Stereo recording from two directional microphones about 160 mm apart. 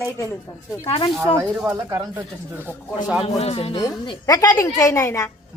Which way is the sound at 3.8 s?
20° left (ahead or behind).